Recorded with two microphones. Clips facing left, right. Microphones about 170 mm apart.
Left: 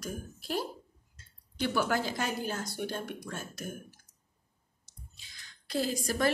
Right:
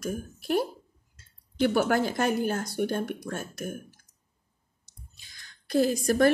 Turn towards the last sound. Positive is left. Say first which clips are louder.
# right 8 dB
turn(degrees=-50)  # may be behind; listen again after turning